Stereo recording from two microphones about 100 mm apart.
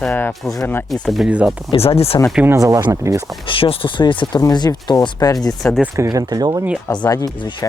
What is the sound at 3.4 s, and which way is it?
Speech, 60° left (ahead or behind).